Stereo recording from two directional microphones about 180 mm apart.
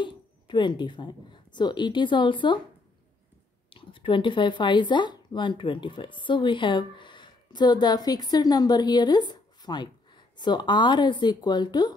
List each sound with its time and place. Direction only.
0.0 s speech: 25° left (ahead or behind)
3.7 s speech: 30° left (ahead or behind)